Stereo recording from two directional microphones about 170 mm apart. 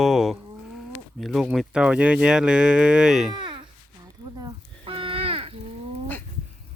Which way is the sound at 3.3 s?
25° right (ahead or behind).